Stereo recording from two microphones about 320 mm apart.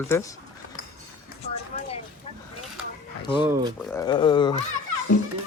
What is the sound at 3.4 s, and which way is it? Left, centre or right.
Speech, centre.